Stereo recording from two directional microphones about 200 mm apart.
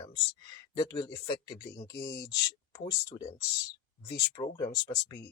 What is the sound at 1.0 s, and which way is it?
Speech, 20° left (ahead or behind).